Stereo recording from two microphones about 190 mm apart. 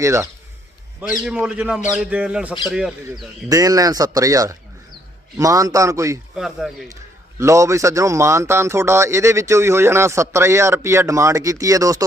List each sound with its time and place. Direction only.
0.0 s speech: 15° right (ahead or behind)
1.2 s a man's voice: 5° right (ahead or behind)
3.5 s speech: 20° right (ahead or behind)
6.3 s a man's voice: centre (ahead or behind)
7.3 s speech: 15° right (ahead or behind)